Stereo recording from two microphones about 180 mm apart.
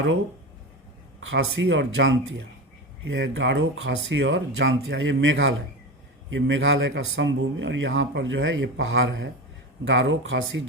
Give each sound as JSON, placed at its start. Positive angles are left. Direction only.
{"t": 1.2, "sound": "speech", "side_deg": -90}